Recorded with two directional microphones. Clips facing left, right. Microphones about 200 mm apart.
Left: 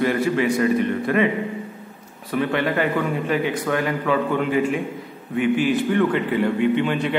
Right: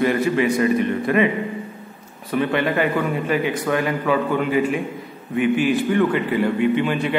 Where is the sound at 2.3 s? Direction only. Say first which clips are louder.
Right 1 dB; 20° right (ahead or behind).